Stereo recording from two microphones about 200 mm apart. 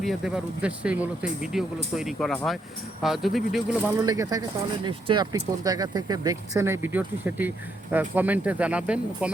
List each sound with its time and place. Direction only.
0.0 s speech: centre (ahead or behind)
4.0 s speech: 20° right (ahead or behind)